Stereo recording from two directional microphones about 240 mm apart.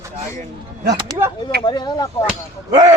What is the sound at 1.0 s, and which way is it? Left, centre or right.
Speech, centre.